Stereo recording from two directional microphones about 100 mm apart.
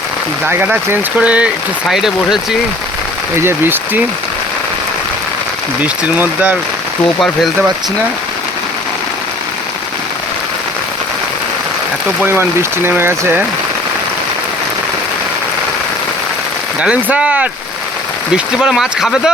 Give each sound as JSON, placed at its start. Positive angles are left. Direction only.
{"t": 0.4, "sound": "speech", "side_deg": -15}
{"t": 3.3, "sound": "speech", "side_deg": -25}
{"t": 5.8, "sound": "speech", "side_deg": -15}
{"t": 12.2, "sound": "speech", "side_deg": -20}
{"t": 16.8, "sound": "speech", "side_deg": -10}